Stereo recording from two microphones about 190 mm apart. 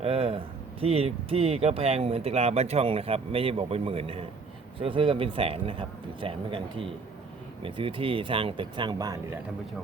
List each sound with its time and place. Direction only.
0.0 s speech: 30° right (ahead or behind)